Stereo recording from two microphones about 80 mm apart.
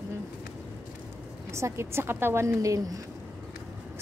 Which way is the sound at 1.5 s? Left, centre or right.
Right.